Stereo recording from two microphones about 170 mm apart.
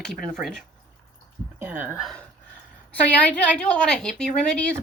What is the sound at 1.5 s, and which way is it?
Speech, 10° right (ahead or behind).